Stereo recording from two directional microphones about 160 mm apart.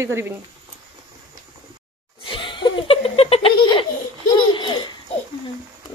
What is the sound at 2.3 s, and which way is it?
Laughter, 30° left (ahead or behind).